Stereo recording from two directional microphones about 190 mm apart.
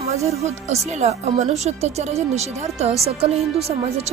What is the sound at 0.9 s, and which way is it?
Speech, 35° right (ahead or behind).